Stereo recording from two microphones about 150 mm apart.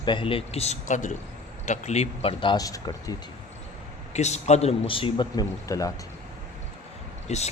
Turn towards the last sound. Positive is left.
turn(degrees=50)  # may be behind; listen again after turning